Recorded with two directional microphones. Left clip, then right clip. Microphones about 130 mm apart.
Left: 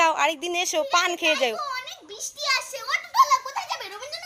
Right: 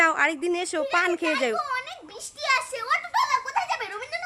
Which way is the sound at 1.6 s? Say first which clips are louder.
Right 1 dB; 20° right (ahead or behind).